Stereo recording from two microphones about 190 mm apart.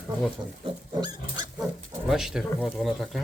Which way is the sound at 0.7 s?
20° right (ahead or behind).